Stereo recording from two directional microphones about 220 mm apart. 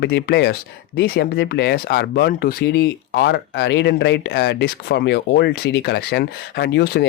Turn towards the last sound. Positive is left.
turn(degrees=50)  # may be behind; listen again after turning